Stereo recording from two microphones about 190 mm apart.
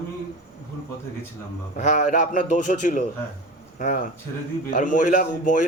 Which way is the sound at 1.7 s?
40° left (ahead or behind).